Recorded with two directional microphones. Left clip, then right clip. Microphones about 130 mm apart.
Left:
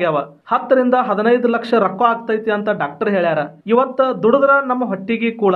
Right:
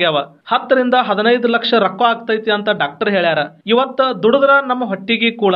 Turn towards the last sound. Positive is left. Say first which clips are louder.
# right 2 dB
turn(degrees=-15)  # may be behind; listen again after turning